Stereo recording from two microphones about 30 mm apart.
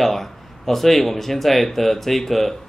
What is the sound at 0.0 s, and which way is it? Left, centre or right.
Speech, centre.